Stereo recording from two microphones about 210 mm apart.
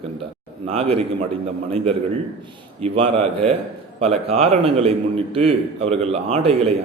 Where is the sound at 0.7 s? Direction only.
30° right (ahead or behind).